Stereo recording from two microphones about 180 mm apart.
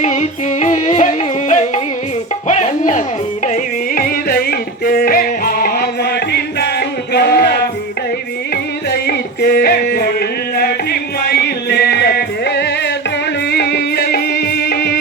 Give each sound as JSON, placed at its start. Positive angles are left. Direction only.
{"t": 0.0, "sound": "music", "side_deg": 40}
{"t": 8.9, "sound": "music", "side_deg": 60}